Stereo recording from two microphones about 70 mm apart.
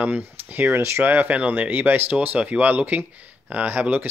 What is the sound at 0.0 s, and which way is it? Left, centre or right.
Speech, right.